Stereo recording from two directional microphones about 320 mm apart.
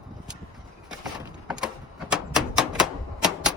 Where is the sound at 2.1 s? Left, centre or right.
Centre.